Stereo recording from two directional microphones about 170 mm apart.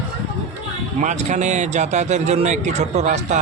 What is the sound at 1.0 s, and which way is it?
A man's voice, 45° right (ahead or behind).